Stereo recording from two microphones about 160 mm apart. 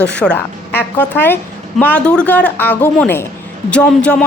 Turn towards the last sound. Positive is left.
turn(degrees=5)  # may be behind; listen again after turning